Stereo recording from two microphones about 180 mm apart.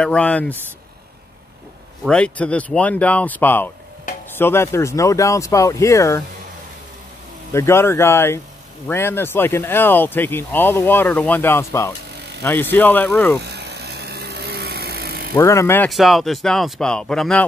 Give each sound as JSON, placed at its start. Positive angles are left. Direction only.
{"t": 0.0, "sound": "speech", "side_deg": 5}
{"t": 2.0, "sound": "speech", "side_deg": 5}
{"t": 7.5, "sound": "speech", "side_deg": 15}
{"t": 13.4, "sound": "a sound", "side_deg": -65}
{"t": 15.3, "sound": "speech", "side_deg": 15}
{"t": 15.9, "sound": "speech", "side_deg": 0}